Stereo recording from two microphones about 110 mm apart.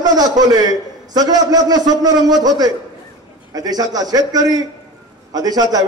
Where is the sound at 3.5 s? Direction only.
35° right (ahead or behind).